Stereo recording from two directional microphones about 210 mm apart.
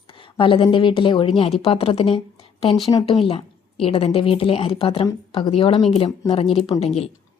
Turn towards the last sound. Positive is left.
turn(degrees=25)  # may be behind; listen again after turning